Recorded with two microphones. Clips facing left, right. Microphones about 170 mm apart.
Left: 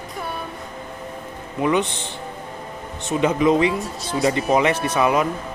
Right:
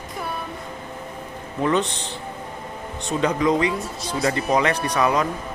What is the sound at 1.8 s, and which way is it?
Speech, 20° right (ahead or behind).